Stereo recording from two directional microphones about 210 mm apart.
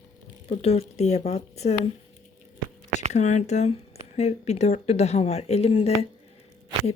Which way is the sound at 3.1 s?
35° left (ahead or behind).